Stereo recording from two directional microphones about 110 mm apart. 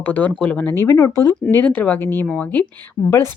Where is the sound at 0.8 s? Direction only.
30° left (ahead or behind).